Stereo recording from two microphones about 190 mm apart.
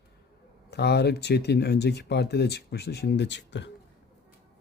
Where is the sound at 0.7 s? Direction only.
60° left (ahead or behind).